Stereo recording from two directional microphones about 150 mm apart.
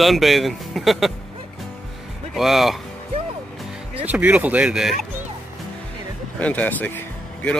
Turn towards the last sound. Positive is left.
turn(degrees=10)  # may be behind; listen again after turning